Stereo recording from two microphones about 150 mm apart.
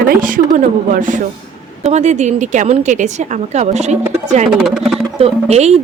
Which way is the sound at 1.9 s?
50° right (ahead or behind).